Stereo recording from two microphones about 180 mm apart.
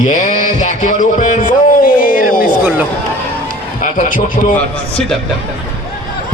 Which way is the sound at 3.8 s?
45° left (ahead or behind).